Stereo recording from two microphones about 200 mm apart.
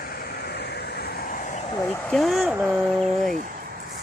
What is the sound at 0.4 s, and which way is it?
Vehicle, 55° left (ahead or behind).